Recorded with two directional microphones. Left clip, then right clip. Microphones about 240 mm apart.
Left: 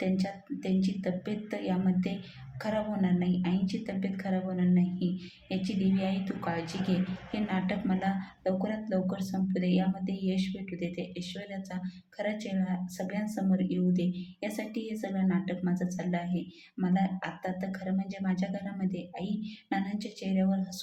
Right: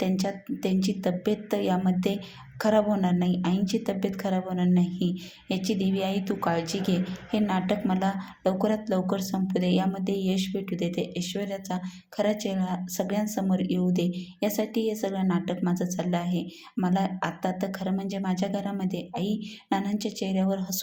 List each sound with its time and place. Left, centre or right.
0.0 s speech: right